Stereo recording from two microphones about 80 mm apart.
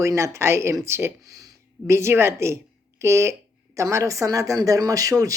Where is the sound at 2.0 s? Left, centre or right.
Right.